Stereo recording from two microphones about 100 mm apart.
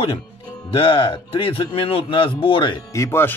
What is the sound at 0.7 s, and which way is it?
Speech, 65° left (ahead or behind).